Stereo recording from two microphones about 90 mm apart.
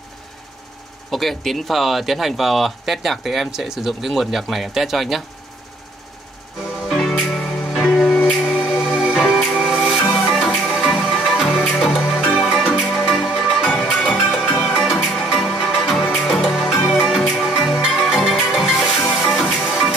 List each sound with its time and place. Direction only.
1.1 s speech: centre (ahead or behind)
6.9 s music: 5° left (ahead or behind)
8.2 s music: 20° left (ahead or behind)
8.6 s music: 10° right (ahead or behind)